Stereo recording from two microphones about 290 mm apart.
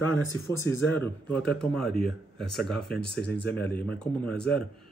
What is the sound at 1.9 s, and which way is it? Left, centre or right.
Speech, right.